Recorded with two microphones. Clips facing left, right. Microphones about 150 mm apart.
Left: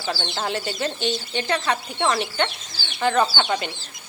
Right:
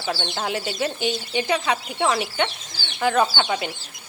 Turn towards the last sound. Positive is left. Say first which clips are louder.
# even
turn(degrees=0)  # may be behind; listen again after turning